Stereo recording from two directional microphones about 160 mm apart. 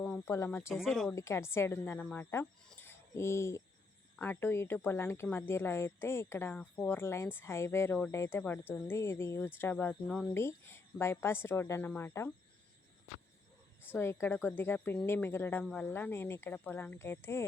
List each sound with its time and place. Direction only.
0.0 s speech: 15° left (ahead or behind)
0.7 s speech: centre (ahead or behind)
1.1 s speech: 15° left (ahead or behind)
2.8 s a sound: 15° left (ahead or behind)
4.2 s speech: 15° left (ahead or behind)
13.8 s speech: 15° left (ahead or behind)